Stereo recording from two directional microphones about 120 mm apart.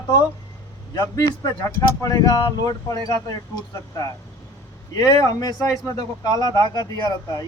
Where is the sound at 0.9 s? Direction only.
35° left (ahead or behind).